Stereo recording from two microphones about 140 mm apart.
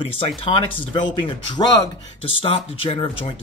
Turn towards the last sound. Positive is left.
turn(degrees=40)  # may be behind; listen again after turning